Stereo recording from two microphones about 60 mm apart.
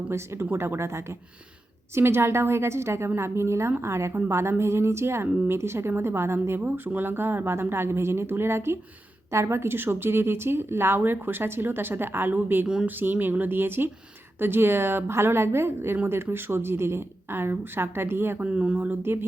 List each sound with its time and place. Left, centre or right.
0.5 s speech: right
18.5 s speech: right
18.8 s speech: right